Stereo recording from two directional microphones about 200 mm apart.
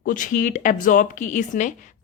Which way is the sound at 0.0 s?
40° left (ahead or behind).